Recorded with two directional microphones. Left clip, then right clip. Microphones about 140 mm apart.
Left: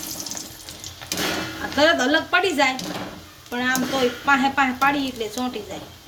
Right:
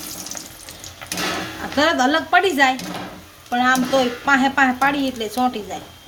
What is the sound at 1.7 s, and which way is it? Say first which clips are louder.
Speech: right 1 dB; 40° right (ahead or behind).